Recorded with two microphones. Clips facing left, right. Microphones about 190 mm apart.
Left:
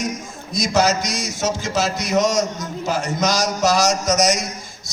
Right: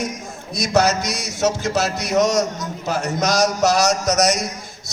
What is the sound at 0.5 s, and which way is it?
A man's voice, 65° right (ahead or behind).